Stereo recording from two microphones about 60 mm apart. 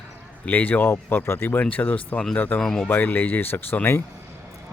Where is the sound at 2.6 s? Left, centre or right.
Centre.